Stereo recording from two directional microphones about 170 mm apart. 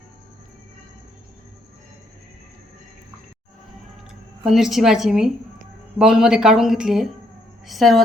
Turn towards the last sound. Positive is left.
turn(degrees=0)  # may be behind; listen again after turning